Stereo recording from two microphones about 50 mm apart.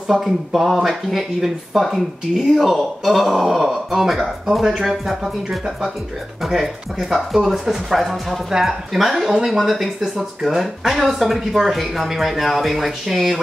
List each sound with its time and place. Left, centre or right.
0.1 s speech: centre